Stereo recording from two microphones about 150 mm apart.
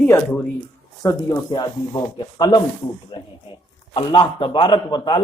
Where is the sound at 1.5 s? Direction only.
30° left (ahead or behind).